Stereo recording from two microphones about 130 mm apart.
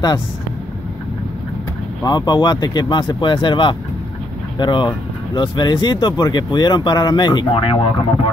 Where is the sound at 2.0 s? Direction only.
35° left (ahead or behind).